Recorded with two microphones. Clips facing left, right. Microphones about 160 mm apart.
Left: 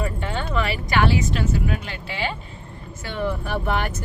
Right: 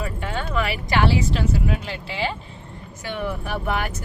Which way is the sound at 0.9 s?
30° right (ahead or behind).